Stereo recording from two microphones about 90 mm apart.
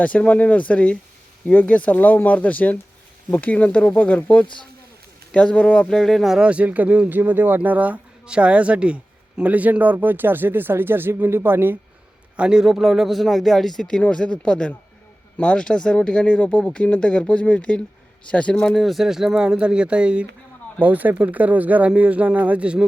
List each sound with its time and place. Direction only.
0.0 s speech: 15° left (ahead or behind); by 11.8 s 25° right (ahead or behind)
12.4 s a man's voice: 10° right (ahead or behind)